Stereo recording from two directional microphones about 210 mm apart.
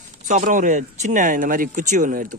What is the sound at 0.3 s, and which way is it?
Speech, 40° right (ahead or behind).